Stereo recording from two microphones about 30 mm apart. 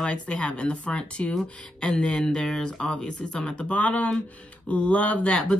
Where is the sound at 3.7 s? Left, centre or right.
Left.